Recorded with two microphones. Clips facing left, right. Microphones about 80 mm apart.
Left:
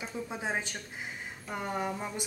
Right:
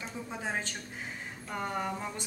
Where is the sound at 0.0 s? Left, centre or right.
Centre.